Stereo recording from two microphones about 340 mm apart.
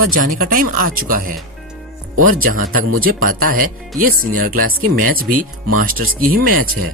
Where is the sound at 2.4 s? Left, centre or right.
Right.